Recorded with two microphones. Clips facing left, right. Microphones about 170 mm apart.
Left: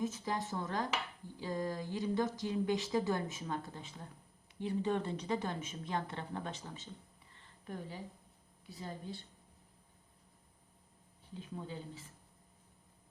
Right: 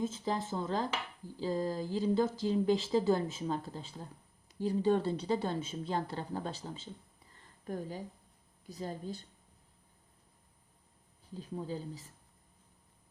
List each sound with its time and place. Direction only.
0.0 s a woman's voice: 25° right (ahead or behind)
7.6 s a woman's voice: 40° right (ahead or behind)
11.3 s a woman's voice: 35° right (ahead or behind)